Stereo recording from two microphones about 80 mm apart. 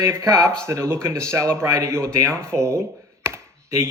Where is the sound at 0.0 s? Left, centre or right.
Right.